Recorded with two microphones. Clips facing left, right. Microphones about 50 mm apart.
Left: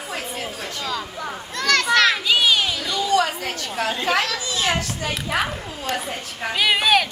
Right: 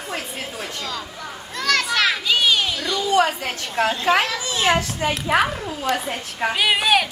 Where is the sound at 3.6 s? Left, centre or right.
Right.